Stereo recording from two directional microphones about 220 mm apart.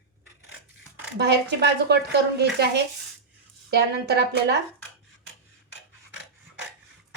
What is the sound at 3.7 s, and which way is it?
Speech, 50° right (ahead or behind).